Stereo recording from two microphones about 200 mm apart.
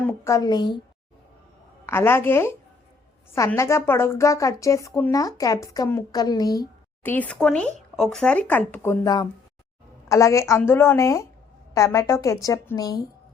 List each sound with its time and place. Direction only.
0.0 s a woman's voice: 10° left (ahead or behind)
1.9 s a woman's voice: 10° left (ahead or behind)